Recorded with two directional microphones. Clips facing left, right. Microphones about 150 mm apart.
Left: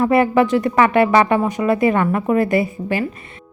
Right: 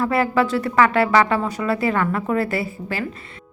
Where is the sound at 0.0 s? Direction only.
20° left (ahead or behind).